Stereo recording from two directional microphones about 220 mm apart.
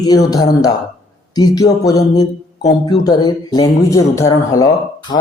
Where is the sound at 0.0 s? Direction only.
15° left (ahead or behind).